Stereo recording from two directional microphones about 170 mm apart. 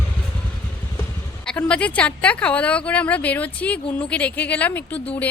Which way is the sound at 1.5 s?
5° left (ahead or behind).